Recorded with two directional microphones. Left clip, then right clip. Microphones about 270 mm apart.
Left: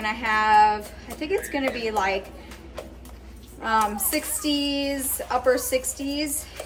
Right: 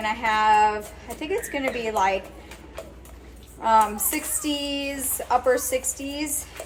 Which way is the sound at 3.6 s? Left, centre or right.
Centre.